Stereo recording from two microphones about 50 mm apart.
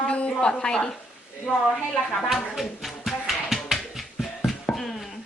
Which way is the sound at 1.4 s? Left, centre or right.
Centre.